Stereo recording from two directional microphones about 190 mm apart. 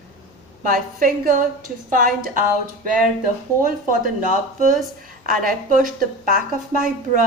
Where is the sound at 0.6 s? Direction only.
45° right (ahead or behind).